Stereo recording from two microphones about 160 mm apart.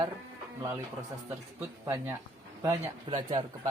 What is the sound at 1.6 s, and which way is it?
Speech, 15° right (ahead or behind).